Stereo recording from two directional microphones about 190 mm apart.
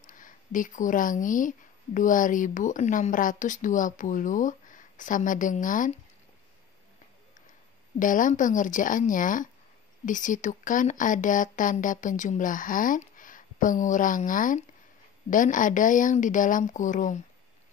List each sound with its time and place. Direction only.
0.0 s speech: 45° left (ahead or behind)
8.0 s speech: 45° left (ahead or behind)